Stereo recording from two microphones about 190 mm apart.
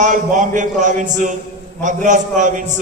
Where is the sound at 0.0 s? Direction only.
40° right (ahead or behind).